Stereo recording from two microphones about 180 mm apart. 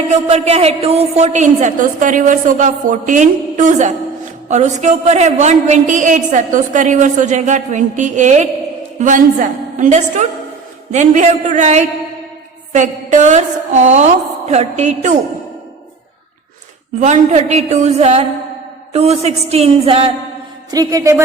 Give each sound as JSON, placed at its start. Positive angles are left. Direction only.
{"t": 0.1, "sound": "a woman's voice", "side_deg": -35}
{"t": 17.0, "sound": "a woman's voice", "side_deg": -40}
{"t": 20.7, "sound": "a woman's voice", "side_deg": -20}